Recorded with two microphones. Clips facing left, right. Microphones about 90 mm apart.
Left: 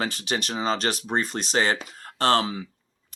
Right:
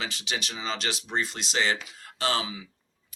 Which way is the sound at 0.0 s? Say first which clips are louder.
Left 6 dB; 45° left (ahead or behind).